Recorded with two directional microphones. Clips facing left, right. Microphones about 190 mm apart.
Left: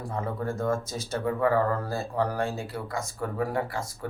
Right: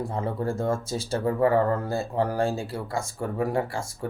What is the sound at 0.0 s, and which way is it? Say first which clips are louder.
Speech: right 3 dB; 30° right (ahead or behind).